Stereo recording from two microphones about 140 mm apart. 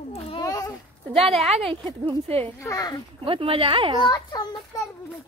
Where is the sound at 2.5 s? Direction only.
25° left (ahead or behind).